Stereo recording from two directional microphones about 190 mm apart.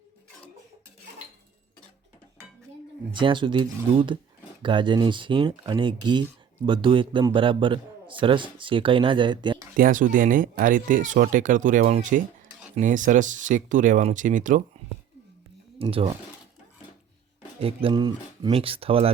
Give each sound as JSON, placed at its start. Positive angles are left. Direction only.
{"t": 3.1, "sound": "a man's voice", "side_deg": -25}
{"t": 9.7, "sound": "speech", "side_deg": -45}
{"t": 15.8, "sound": "a man's voice", "side_deg": -30}
{"t": 17.6, "sound": "a man's voice", "side_deg": -30}